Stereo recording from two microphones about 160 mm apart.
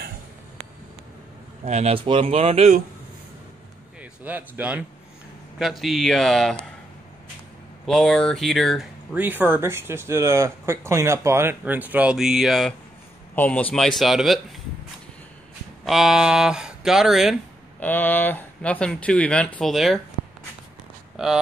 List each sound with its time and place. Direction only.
1.6 s a man's voice: 40° right (ahead or behind)
4.0 s speech: 10° right (ahead or behind)
7.8 s speech: 5° left (ahead or behind)
9.1 s speech: 10° right (ahead or behind)
13.3 s speech: 10° left (ahead or behind)
15.8 s speech: centre (ahead or behind)
17.7 s speech: 10° left (ahead or behind)
21.2 s speech: centre (ahead or behind)